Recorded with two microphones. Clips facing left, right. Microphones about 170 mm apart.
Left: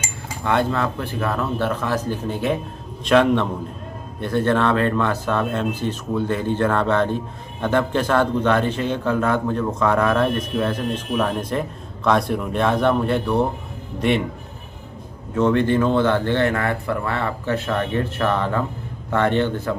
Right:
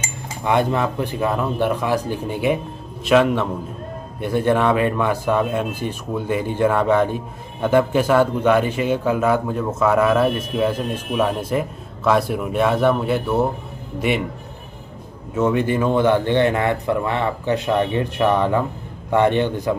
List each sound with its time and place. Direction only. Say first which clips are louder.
0.4 s a man's voice: right 2 dB; 15° right (ahead or behind)
15.3 s a man's voice: left 1 dB; 10° right (ahead or behind)